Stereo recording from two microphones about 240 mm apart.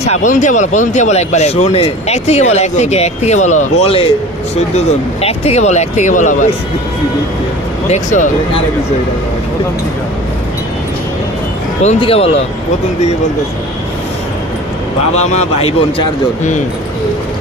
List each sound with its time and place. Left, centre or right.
0.1 s speech: left
5.2 s speech: left
7.9 s speech: left
11.8 s speech: left
15.1 s speech: left